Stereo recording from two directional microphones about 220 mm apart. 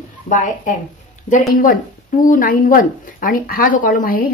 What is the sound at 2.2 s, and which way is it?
Speech, 40° left (ahead or behind).